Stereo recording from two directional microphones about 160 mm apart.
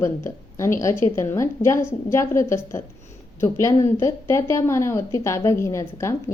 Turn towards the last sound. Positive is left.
turn(degrees=20)  # may be behind; listen again after turning